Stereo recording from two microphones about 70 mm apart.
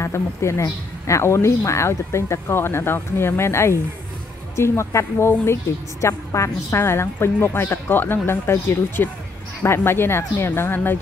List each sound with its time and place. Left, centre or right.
0.0 s speech: left